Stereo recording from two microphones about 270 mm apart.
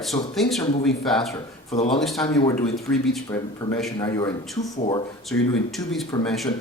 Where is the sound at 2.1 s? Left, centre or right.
Centre.